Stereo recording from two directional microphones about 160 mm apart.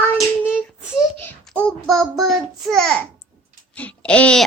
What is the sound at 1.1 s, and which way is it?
A child's voice, 10° left (ahead or behind).